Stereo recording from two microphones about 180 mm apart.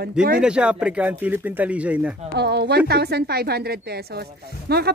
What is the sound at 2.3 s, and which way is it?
Speech, 65° right (ahead or behind).